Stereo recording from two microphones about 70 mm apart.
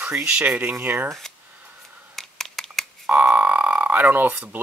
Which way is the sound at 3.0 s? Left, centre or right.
Right.